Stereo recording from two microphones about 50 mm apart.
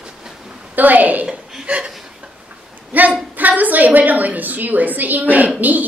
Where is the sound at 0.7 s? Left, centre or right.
Right.